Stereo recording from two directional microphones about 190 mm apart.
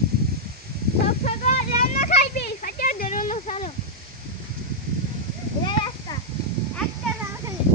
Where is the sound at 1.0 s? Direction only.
40° left (ahead or behind).